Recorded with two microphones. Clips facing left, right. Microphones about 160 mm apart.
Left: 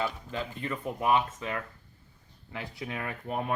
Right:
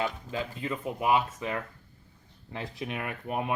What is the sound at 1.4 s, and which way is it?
Speech, 20° right (ahead or behind).